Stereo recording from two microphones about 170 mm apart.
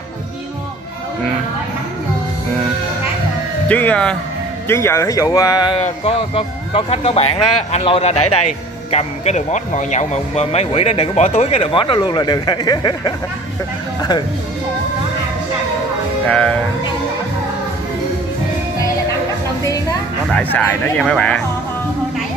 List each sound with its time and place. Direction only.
3.6 s speech: 10° left (ahead or behind)
5.8 s speech: 40° left (ahead or behind)
16.3 s speech: 5° left (ahead or behind)
19.6 s a sound: 20° left (ahead or behind)
20.2 s speech: 5° left (ahead or behind)